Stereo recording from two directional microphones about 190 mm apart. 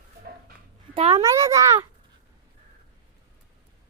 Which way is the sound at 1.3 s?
15° right (ahead or behind).